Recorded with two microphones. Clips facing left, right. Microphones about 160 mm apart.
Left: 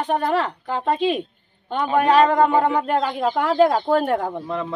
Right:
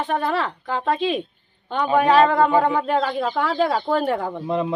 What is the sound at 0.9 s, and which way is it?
Speech, 45° left (ahead or behind).